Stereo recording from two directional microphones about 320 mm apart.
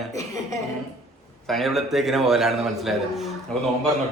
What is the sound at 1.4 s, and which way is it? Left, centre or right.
A man's voice, centre.